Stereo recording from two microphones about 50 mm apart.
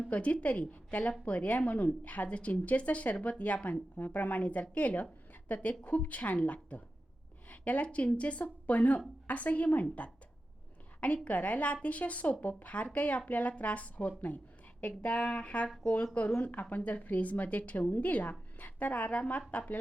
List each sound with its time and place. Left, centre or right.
0.1 s a woman's voice: left
11.0 s a woman's voice: left